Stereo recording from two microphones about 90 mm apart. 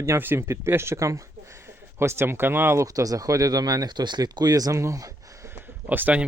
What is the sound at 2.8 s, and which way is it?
Speech, 40° right (ahead or behind).